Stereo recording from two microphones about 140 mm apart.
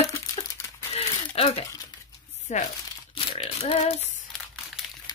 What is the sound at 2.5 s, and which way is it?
Speech, 55° left (ahead or behind).